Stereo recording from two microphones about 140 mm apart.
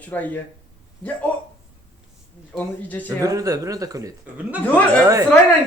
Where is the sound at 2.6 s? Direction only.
10° left (ahead or behind).